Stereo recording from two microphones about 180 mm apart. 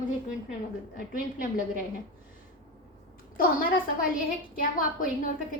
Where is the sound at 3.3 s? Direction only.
50° left (ahead or behind).